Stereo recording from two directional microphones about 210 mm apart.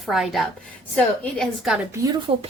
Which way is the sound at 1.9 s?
15° right (ahead or behind).